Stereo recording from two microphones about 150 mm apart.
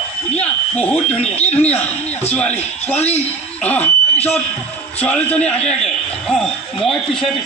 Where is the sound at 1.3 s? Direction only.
10° left (ahead or behind).